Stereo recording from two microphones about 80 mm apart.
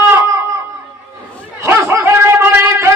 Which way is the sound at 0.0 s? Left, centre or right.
Right.